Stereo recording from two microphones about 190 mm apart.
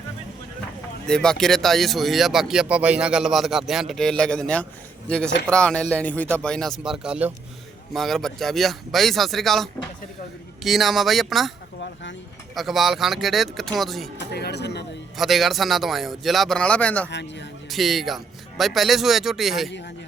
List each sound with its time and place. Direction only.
1.0 s speech: 5° left (ahead or behind)
12.5 s speech: centre (ahead or behind)
14.3 s speech: 60° left (ahead or behind)
15.2 s speech: centre (ahead or behind)